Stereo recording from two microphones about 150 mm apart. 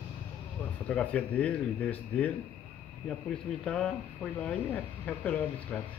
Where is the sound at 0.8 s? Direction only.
10° left (ahead or behind).